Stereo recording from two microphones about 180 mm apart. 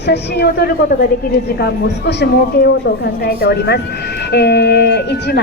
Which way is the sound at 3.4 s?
65° left (ahead or behind).